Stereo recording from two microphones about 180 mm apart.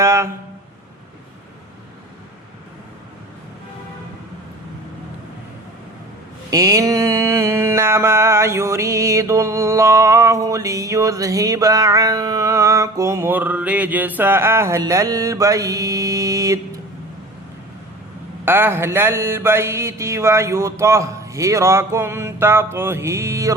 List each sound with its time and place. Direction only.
0.0 s a sound: 15° right (ahead or behind)
6.5 s mantra: 20° right (ahead or behind)
18.4 s mantra: 10° right (ahead or behind)